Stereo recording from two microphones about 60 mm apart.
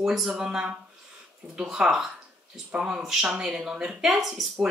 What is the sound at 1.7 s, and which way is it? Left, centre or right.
Speech, centre.